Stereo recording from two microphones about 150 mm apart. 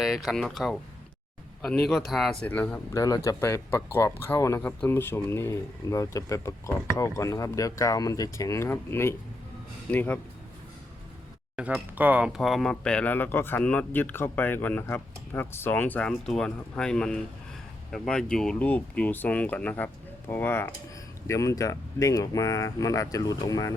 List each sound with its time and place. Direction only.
0.0 s speech: centre (ahead or behind)
1.9 s speech: centre (ahead or behind)
2.5 s speech: 10° left (ahead or behind)
2.9 s speech: 25° left (ahead or behind)
11.5 s speech: 10° right (ahead or behind); by 23.7 s 25° left (ahead or behind)